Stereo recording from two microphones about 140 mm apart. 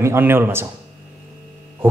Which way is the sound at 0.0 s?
15° right (ahead or behind).